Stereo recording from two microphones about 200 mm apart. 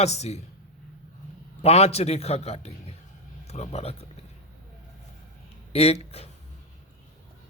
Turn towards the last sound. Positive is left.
turn(degrees=30)  # may be behind; listen again after turning